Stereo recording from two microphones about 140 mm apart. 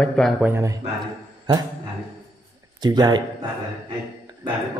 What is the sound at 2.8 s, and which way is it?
Speech, 30° right (ahead or behind).